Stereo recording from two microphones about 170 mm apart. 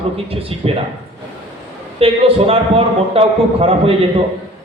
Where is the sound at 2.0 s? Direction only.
35° right (ahead or behind).